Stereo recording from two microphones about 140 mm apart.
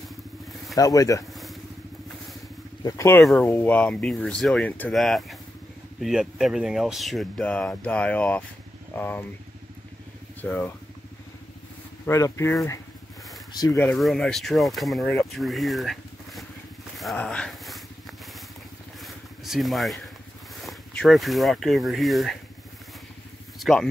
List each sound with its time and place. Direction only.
0.7 s speech: 25° left (ahead or behind)
1.3 s vehicle: centre (ahead or behind)
2.8 s speech: 20° left (ahead or behind)
10.4 s speech: 10° left (ahead or behind)
12.1 s speech: 20° left (ahead or behind)
13.7 s speech: 5° left (ahead or behind)
16.9 s a sound: centre (ahead or behind)
19.0 s vehicle: centre (ahead or behind)
20.6 s speech: centre (ahead or behind)
23.6 s speech: 5° left (ahead or behind)